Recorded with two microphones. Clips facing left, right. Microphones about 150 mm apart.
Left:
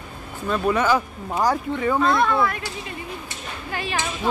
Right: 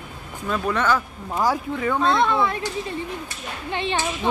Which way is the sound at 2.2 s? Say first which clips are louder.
Even; 20° right (ahead or behind).